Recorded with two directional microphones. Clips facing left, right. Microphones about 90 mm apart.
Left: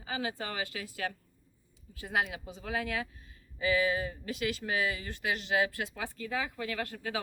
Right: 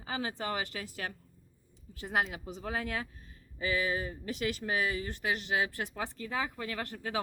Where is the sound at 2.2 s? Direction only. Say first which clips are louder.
Right 1 dB; 35° right (ahead or behind).